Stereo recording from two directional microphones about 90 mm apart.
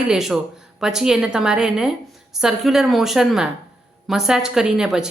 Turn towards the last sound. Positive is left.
turn(degrees=-5)  # may be behind; listen again after turning